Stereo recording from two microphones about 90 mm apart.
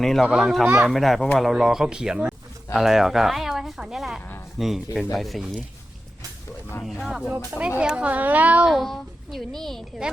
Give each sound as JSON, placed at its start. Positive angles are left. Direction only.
{"t": 0.0, "sound": "speech", "side_deg": 5}
{"t": 6.8, "sound": "speech", "side_deg": 0}
{"t": 8.7, "sound": "speech", "side_deg": 0}